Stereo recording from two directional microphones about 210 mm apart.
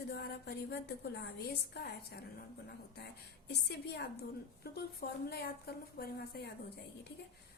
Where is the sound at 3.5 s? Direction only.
50° left (ahead or behind).